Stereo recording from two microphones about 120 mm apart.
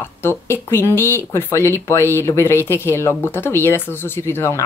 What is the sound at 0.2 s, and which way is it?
Speech, 20° left (ahead or behind).